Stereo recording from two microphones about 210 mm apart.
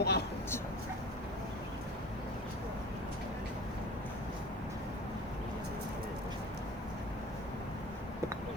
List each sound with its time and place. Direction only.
0.0 s speech: 50° left (ahead or behind)